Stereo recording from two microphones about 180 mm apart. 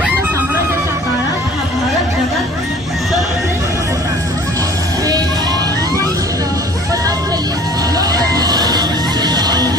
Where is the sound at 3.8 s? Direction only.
15° right (ahead or behind).